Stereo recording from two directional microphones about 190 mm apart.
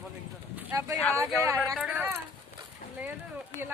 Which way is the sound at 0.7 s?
15° right (ahead or behind).